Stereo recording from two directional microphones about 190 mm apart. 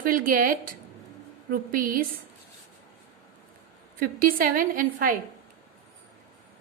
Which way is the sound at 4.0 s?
50° right (ahead or behind).